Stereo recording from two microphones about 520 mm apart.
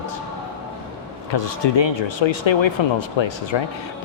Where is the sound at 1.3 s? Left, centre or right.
Left.